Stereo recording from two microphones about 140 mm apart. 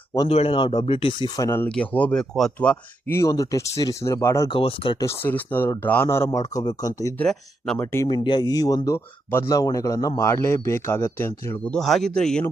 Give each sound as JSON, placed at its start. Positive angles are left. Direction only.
{"t": 0.3, "sound": "speech", "side_deg": 45}
{"t": 1.4, "sound": "speech", "side_deg": 20}
{"t": 4.5, "sound": "speech", "side_deg": 40}
{"t": 4.9, "sound": "speech", "side_deg": 20}
{"t": 7.2, "sound": "speech", "side_deg": 5}
{"t": 8.0, "sound": "speech", "side_deg": 35}